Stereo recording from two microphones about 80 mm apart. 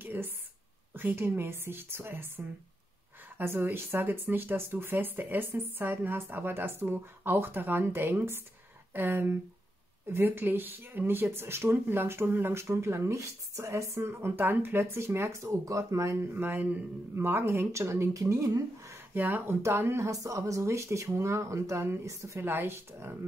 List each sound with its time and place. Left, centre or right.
0.0 s a sound: right
0.9 s speech: right
16.3 s speech: right
17.6 s speech: right
19.1 s speech: right